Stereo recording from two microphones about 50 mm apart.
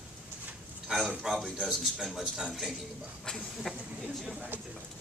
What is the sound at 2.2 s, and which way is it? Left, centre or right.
Speech, centre.